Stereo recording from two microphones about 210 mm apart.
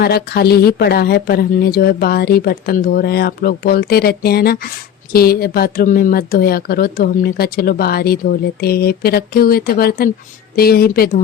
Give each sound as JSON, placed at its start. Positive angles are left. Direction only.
{"t": 0.0, "sound": "speech", "side_deg": 50}